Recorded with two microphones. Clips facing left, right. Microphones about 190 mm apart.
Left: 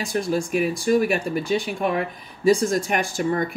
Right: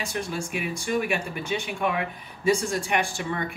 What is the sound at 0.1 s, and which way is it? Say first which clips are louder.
Speech: left 8 dB; 40° left (ahead or behind).